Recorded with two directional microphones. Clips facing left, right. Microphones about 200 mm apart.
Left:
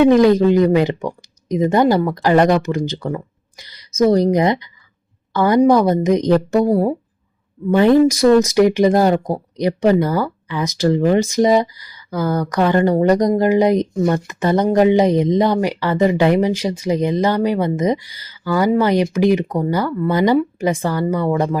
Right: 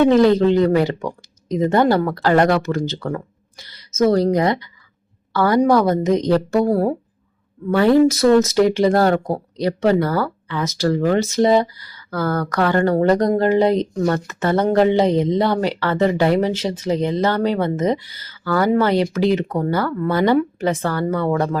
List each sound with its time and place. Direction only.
0.0 s speech: 15° left (ahead or behind)